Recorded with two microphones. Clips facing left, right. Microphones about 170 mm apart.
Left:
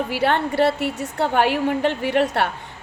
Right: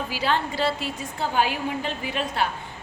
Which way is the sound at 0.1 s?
65° left (ahead or behind).